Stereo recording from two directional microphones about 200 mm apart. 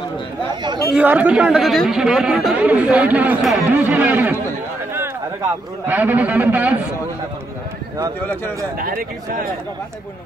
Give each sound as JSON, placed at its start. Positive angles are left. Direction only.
{"t": 0.9, "sound": "speech", "side_deg": -10}
{"t": 5.9, "sound": "speech", "side_deg": -10}
{"t": 8.7, "sound": "a man's voice", "side_deg": -45}